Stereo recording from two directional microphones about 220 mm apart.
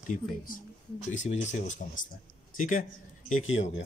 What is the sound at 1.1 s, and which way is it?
A man's voice, 30° left (ahead or behind).